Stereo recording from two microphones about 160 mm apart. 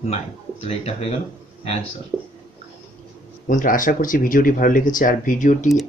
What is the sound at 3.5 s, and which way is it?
Speech, 55° left (ahead or behind).